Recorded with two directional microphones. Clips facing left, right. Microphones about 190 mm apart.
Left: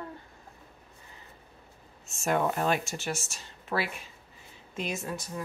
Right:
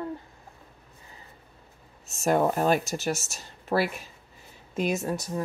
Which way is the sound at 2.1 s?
40° right (ahead or behind).